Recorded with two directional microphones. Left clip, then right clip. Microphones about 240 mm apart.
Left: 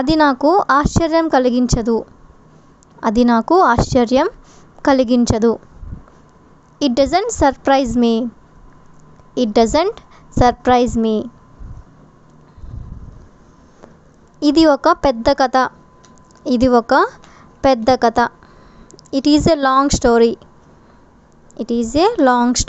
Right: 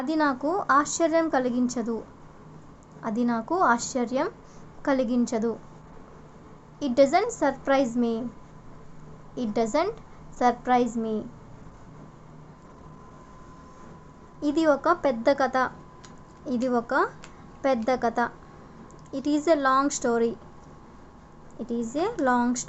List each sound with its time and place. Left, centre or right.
0.0 s a woman's voice: left
6.7 s a woman's voice: left
9.3 s a woman's voice: left
14.3 s a woman's voice: left
21.6 s a woman's voice: left